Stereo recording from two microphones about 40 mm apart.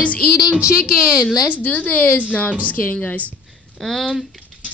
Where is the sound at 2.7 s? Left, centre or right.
Left.